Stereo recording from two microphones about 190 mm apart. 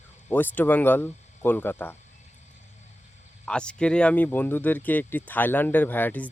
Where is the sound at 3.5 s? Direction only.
5° left (ahead or behind).